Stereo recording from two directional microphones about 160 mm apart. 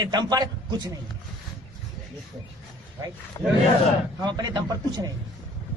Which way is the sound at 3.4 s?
20° left (ahead or behind).